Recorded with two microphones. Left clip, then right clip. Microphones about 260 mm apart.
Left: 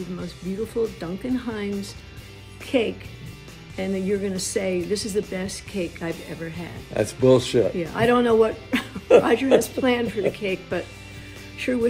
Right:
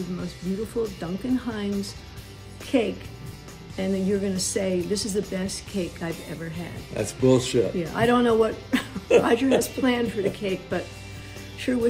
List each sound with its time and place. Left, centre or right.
0.7 s speech: centre
6.9 s speech: centre
7.7 s speech: centre